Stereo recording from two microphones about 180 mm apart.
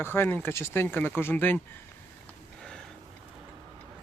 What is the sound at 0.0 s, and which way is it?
Speech, 10° left (ahead or behind).